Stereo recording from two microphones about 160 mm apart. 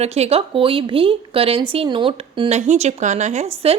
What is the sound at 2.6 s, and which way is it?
Speech, 45° right (ahead or behind).